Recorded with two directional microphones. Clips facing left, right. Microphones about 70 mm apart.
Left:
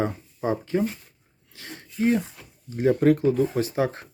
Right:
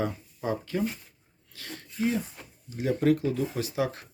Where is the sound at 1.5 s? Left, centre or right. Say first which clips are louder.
Left 4 dB; left.